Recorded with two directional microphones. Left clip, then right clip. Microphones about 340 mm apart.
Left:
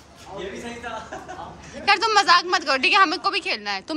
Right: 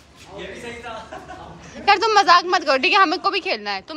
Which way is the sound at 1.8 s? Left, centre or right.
Centre.